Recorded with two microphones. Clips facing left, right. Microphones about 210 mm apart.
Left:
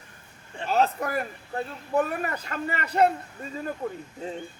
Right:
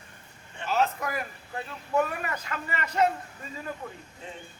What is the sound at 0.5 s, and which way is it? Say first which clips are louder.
Speech: left 3 dB; 35° left (ahead or behind).